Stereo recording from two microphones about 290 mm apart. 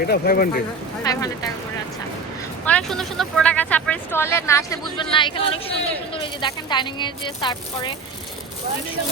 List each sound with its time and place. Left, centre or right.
0.0 s speech: left
1.0 s speech: centre
2.6 s speech: centre